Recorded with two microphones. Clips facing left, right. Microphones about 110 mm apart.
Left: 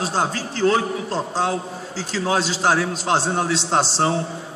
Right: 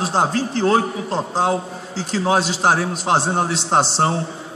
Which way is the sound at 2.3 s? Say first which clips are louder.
Right 3 dB; 45° right (ahead or behind).